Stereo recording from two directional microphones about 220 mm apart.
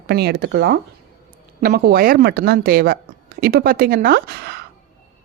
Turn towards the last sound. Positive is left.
turn(degrees=-45)  # may be behind; listen again after turning